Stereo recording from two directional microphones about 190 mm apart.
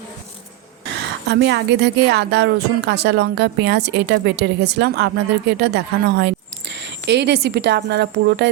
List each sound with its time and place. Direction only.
1.0 s a woman's voice: 65° right (ahead or behind)